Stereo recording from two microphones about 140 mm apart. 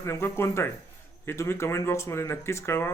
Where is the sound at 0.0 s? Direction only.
20° left (ahead or behind).